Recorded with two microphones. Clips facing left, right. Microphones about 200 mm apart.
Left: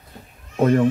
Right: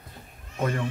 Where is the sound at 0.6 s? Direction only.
45° left (ahead or behind).